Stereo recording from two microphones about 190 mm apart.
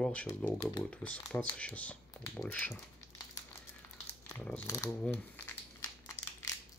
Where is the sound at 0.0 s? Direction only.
5° left (ahead or behind).